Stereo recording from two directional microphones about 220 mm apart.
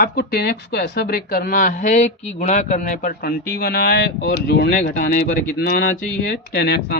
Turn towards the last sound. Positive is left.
turn(degrees=45)  # may be behind; listen again after turning